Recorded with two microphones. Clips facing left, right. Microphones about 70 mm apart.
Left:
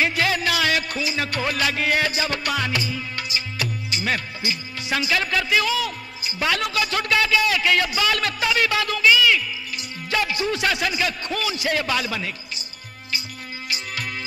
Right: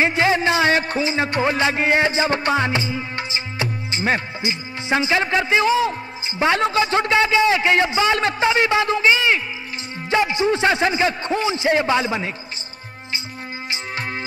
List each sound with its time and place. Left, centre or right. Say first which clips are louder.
0.0 s music: right 4 dB; right